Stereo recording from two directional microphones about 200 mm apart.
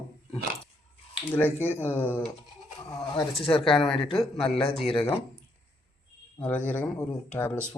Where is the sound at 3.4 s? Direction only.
30° left (ahead or behind).